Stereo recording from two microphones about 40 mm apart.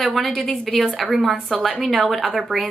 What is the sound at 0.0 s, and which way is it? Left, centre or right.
A woman's voice, centre.